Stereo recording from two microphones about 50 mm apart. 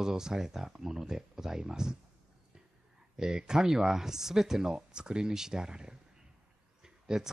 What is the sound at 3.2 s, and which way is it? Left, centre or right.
Speech, centre.